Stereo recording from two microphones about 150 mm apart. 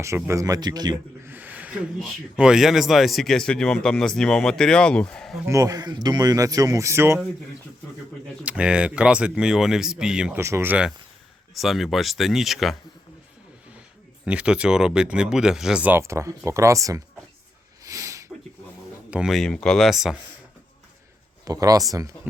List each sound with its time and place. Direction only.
0.0 s speech: 20° right (ahead or behind)
1.3 s speech: 10° right (ahead or behind); by 5.4 s 5° left (ahead or behind)
5.5 s speech: 20° right (ahead or behind)
8.4 s speech: 5° right (ahead or behind)
10.3 s speech: 15° right (ahead or behind); by 12.7 s centre (ahead or behind)
14.3 s speech: 5° right (ahead or behind)
17.8 s sneeze: 20° right (ahead or behind)
19.1 s speech: centre (ahead or behind)
21.4 s speech: 25° right (ahead or behind)